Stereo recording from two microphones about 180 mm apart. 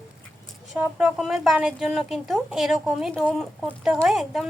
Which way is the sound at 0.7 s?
5° right (ahead or behind).